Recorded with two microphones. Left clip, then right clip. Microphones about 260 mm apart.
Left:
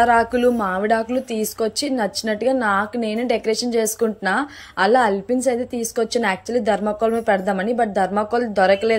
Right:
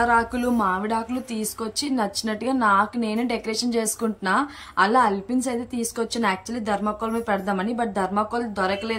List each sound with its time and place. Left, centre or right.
0.0 s a woman's voice: centre